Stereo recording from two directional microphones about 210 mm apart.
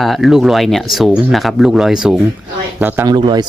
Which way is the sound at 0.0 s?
Centre (ahead or behind).